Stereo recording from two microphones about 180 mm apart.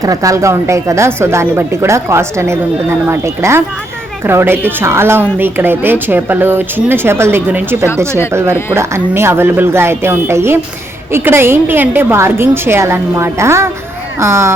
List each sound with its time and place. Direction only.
0.0 s a woman's voice: 20° right (ahead or behind)